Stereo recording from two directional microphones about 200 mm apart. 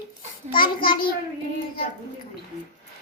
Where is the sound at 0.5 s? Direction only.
25° left (ahead or behind).